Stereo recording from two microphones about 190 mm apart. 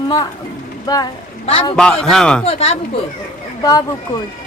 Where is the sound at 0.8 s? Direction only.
20° left (ahead or behind).